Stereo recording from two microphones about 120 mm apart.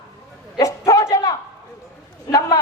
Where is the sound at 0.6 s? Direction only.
25° left (ahead or behind).